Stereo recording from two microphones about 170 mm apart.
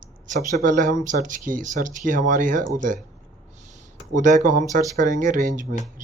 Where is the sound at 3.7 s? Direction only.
50° right (ahead or behind).